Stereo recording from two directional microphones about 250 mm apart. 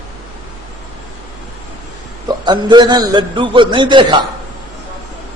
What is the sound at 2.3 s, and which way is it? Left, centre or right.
A man's voice, centre.